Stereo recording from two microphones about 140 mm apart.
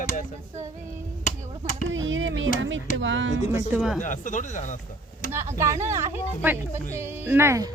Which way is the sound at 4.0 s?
65° left (ahead or behind).